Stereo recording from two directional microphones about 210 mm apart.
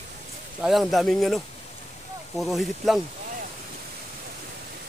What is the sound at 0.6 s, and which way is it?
Speech, centre (ahead or behind).